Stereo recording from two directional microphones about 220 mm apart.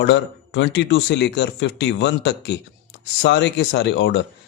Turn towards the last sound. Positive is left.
turn(degrees=50)  # may be behind; listen again after turning